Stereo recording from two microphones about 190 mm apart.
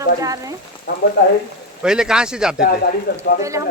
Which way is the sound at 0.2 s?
20° right (ahead or behind).